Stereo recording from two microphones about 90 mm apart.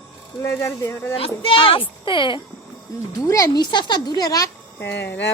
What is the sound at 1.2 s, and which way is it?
A child's voice, 85° left.